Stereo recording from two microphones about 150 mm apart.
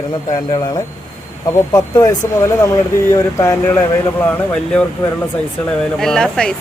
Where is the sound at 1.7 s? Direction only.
25° left (ahead or behind).